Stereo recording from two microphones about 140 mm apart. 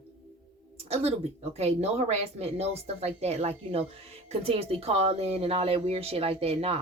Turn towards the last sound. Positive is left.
turn(degrees=-45)  # may be behind; listen again after turning